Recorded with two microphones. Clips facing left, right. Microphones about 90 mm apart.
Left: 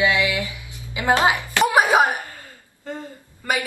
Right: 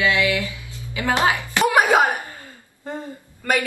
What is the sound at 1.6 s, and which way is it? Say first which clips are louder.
Music: even; 15° left (ahead or behind).